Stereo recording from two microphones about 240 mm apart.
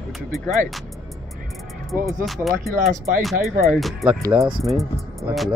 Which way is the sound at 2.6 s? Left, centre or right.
Right.